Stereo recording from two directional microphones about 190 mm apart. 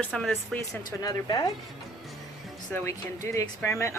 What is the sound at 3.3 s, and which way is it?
Speech, 15° left (ahead or behind).